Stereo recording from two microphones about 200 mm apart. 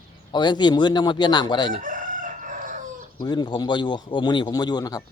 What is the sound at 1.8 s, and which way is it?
Chicken, 40° right (ahead or behind).